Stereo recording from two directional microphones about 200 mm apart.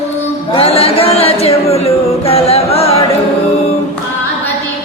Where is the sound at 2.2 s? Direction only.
30° left (ahead or behind).